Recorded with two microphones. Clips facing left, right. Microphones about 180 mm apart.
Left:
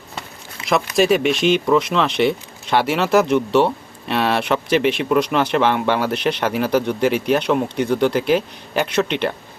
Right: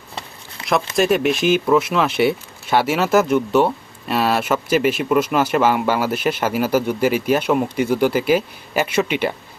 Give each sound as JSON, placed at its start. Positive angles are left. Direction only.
{"t": 0.9, "sound": "speech", "side_deg": 0}